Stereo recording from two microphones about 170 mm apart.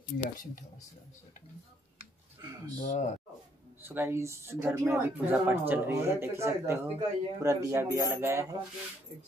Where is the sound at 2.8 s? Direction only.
40° left (ahead or behind).